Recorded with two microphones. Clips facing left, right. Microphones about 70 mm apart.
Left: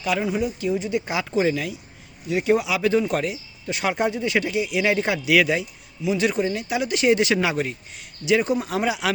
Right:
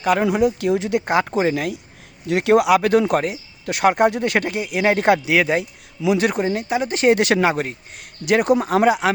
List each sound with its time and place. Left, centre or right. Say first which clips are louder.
0.0 s speech: right 6 dB; right
1.0 s speech: right 4 dB; right
2.2 s speech: right 5 dB; right
2.7 s speech: right 5 dB; right
5.3 s speech: right 1 dB; right
6.1 s speech: right 3 dB; right